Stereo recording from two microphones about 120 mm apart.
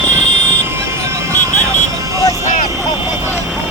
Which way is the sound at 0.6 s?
25° right (ahead or behind).